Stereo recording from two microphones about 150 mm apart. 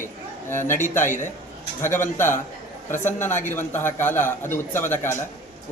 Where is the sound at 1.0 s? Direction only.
60° left (ahead or behind).